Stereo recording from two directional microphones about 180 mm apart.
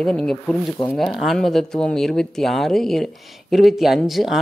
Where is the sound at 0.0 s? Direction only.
5° left (ahead or behind).